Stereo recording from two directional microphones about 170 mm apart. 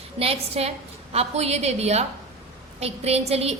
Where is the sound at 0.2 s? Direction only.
35° right (ahead or behind).